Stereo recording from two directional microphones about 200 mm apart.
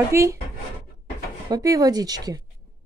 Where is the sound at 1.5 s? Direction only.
20° right (ahead or behind).